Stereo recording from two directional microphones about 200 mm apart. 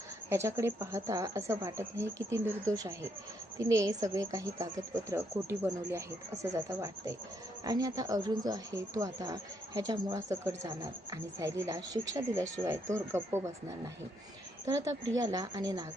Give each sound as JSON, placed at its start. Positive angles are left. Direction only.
{"t": 0.3, "sound": "a woman's voice", "side_deg": -15}